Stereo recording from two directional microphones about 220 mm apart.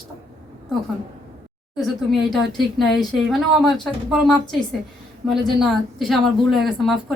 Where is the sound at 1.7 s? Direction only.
Centre (ahead or behind).